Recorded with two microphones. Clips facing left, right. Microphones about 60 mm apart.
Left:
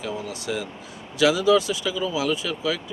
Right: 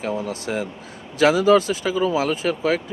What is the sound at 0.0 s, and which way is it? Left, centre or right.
Speech, right.